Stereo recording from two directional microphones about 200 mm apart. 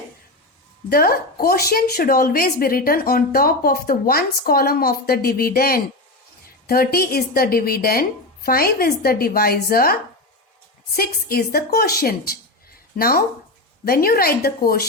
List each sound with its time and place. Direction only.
0.9 s a woman's voice: 50° left (ahead or behind)